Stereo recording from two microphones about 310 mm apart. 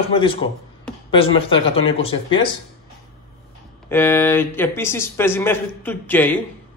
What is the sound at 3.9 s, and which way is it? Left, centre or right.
A man's voice, centre.